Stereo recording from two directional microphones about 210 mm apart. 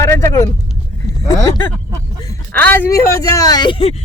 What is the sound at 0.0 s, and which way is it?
Vehicle, 15° left (ahead or behind).